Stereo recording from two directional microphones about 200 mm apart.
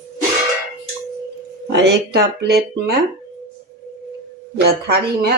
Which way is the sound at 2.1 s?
55° right (ahead or behind).